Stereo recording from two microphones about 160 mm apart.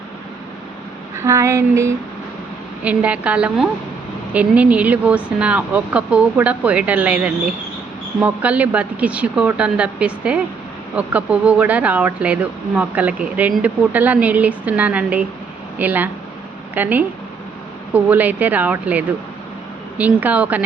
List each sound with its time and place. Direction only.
1.1 s speech: 20° right (ahead or behind)